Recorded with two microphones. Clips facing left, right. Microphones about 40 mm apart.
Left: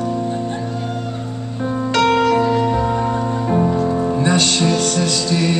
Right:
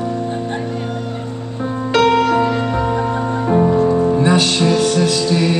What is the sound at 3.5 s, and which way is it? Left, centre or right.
Music, centre.